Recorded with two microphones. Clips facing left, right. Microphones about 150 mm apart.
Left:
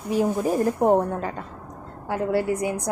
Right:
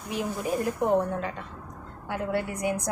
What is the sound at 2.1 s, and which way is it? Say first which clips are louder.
Speech: left 6 dB; 30° left (ahead or behind).